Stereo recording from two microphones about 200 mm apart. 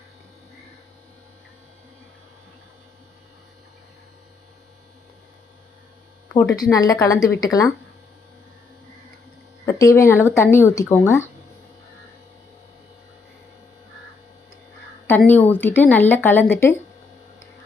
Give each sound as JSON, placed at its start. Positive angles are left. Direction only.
{"t": 6.2, "sound": "a sound", "side_deg": 5}
{"t": 6.6, "sound": "speech", "side_deg": 20}
{"t": 9.6, "sound": "speech", "side_deg": 15}
{"t": 15.3, "sound": "speech", "side_deg": 10}